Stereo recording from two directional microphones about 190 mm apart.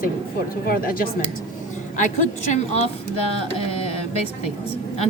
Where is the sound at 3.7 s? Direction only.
30° left (ahead or behind).